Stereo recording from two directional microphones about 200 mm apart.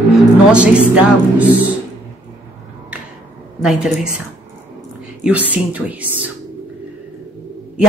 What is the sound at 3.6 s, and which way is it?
Speech, 5° right (ahead or behind).